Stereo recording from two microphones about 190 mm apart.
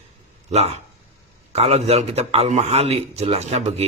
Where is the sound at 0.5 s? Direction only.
35° right (ahead or behind).